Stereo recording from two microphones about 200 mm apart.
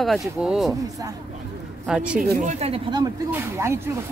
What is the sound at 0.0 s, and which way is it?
Speech, centre (ahead or behind).